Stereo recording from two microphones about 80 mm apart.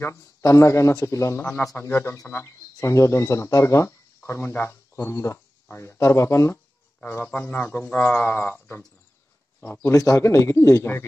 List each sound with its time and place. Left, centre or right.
0.0 s speech: left
2.4 s speech: left
7.0 s speech: left
9.6 s speech: left